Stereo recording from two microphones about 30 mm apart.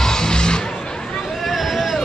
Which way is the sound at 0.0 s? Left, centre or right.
Left.